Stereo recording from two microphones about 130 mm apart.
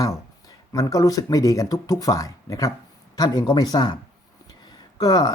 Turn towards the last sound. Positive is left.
turn(degrees=30)  # may be behind; listen again after turning